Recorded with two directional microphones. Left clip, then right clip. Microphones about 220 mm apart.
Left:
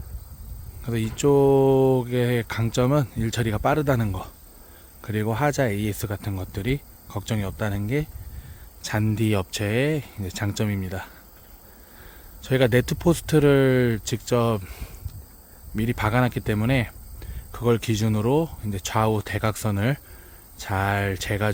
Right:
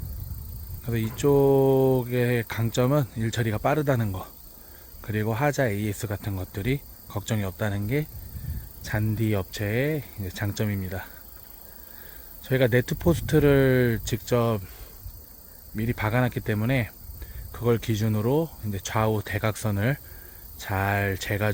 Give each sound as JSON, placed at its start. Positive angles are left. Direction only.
{"t": 0.9, "sound": "speech", "side_deg": 15}
{"t": 12.4, "sound": "speech", "side_deg": 20}
{"t": 15.7, "sound": "speech", "side_deg": 20}